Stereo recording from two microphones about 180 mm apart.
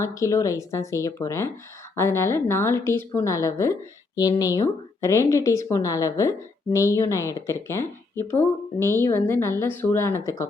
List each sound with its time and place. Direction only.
0.0 s speech: 15° left (ahead or behind)